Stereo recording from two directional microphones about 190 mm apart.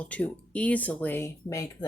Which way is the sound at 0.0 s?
5° left (ahead or behind).